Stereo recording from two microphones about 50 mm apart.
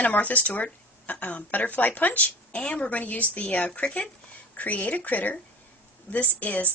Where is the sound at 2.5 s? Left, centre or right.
Left.